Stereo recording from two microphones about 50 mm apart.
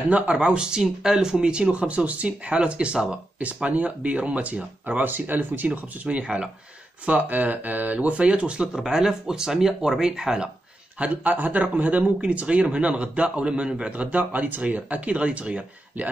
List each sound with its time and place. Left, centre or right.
0.1 s speech: right
5.7 s speech: right
8.7 s speech: centre
11.0 s speech: right; by 13.9 s centre
13.9 s speech: right